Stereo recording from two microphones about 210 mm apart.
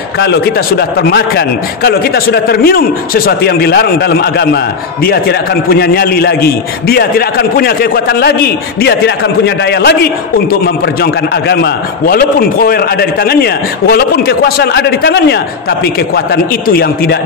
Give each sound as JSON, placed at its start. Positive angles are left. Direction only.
{"t": 0.2, "sound": "a man's voice", "side_deg": 50}
{"t": 5.7, "sound": "a man's voice", "side_deg": 45}
{"t": 16.6, "sound": "a man's voice", "side_deg": 45}